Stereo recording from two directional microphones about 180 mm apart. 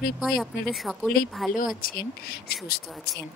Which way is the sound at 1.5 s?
50° left (ahead or behind).